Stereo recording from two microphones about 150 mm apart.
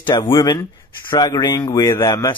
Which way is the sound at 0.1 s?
20° left (ahead or behind).